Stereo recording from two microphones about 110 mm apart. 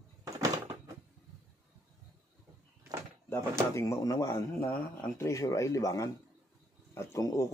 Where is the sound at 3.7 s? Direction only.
30° left (ahead or behind).